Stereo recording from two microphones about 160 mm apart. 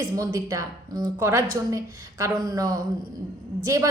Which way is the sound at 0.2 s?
25° right (ahead or behind).